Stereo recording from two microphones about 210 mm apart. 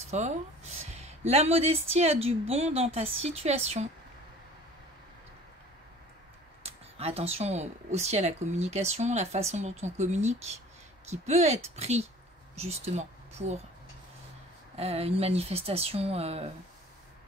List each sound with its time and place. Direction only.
0.1 s a woman's voice: 35° right (ahead or behind)
6.6 s speech: 30° right (ahead or behind)
14.8 s a woman's voice: 30° right (ahead or behind)